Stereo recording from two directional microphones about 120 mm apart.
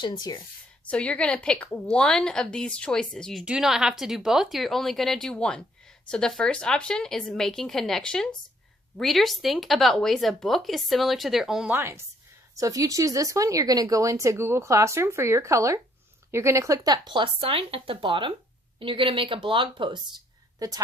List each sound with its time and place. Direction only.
0.0 s speech: 35° left (ahead or behind)
0.9 s a woman's voice: 10° left (ahead or behind)
11.7 s speech: 20° right (ahead or behind); by 20.0 s 45° right (ahead or behind)
20.6 s a woman's voice: 30° right (ahead or behind)